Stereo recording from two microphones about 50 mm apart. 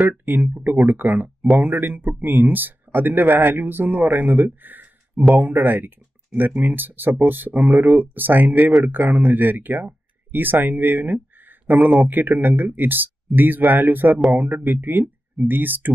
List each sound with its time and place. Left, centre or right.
0.2 s speech: right